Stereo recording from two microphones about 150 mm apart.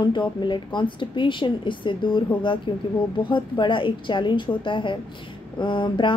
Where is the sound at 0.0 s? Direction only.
30° left (ahead or behind).